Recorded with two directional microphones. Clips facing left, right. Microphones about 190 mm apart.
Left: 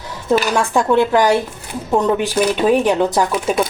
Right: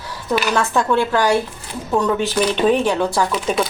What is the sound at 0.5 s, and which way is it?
A woman's voice, 15° left (ahead or behind).